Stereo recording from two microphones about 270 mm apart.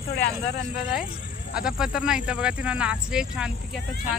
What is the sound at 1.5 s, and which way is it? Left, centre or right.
Speech, centre.